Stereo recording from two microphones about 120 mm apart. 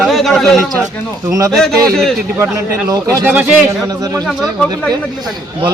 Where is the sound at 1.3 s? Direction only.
30° right (ahead or behind).